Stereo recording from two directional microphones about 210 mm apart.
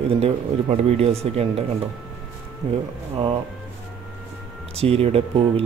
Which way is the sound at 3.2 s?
25° right (ahead or behind).